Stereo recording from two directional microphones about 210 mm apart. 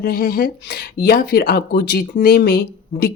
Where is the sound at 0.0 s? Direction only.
45° left (ahead or behind).